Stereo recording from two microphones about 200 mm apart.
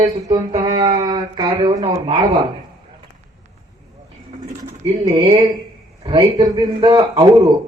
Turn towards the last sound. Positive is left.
turn(degrees=-15)  # may be behind; listen again after turning